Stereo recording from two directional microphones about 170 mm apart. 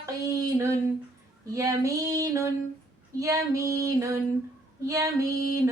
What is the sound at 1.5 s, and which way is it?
A woman's voice, 20° right (ahead or behind).